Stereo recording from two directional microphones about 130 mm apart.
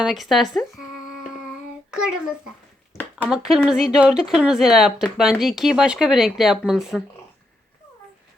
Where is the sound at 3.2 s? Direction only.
5° right (ahead or behind).